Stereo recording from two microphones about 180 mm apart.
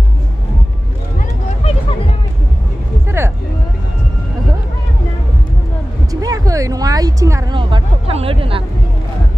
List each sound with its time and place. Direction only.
3.2 s vehicle: 15° right (ahead or behind)
6.2 s music: 20° right (ahead or behind)
7.5 s a sound: 30° right (ahead or behind)